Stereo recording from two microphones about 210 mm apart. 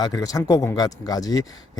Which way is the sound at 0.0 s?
15° left (ahead or behind).